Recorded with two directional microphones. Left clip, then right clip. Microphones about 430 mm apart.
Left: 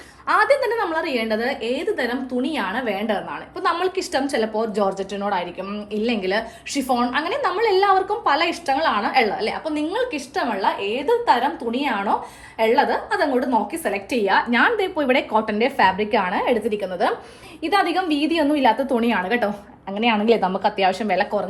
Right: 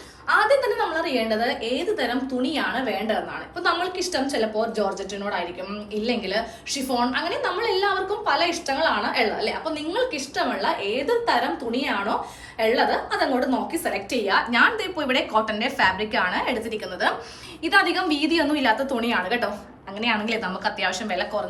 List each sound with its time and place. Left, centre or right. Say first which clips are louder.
0.3 s a woman's voice: left 2 dB; centre
5.9 s a woman's voice: left 3 dB; centre
17.8 s a woman's voice: left 2 dB; centre